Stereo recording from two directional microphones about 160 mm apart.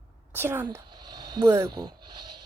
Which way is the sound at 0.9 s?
25° right (ahead or behind).